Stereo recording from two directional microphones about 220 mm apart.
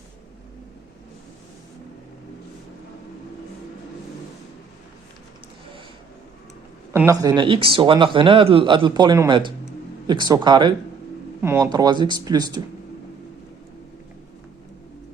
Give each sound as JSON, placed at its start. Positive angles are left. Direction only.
{"t": 6.9, "sound": "speech", "side_deg": -15}